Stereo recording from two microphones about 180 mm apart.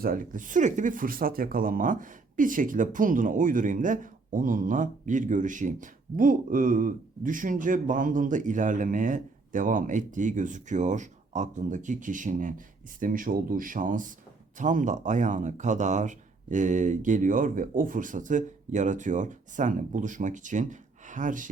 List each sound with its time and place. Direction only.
0.0 s speech: 50° right (ahead or behind)